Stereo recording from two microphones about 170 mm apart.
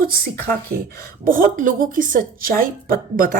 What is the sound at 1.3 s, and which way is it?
A woman's voice, 55° right (ahead or behind).